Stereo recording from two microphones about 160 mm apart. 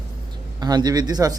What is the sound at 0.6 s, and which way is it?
Speech, 25° right (ahead or behind).